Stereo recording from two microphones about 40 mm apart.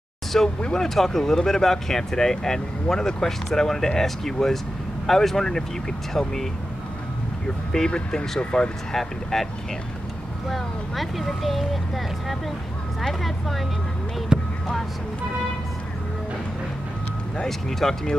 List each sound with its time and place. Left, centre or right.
0.6 s speech: centre
0.8 s speech: centre
7.9 s speech: left
8.9 s speech: centre
10.5 s speech: centre
14.3 s a sound: centre
17.5 s speech: centre